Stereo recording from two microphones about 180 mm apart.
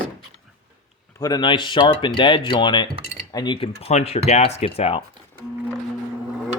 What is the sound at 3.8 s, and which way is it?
Speech, 35° left (ahead or behind).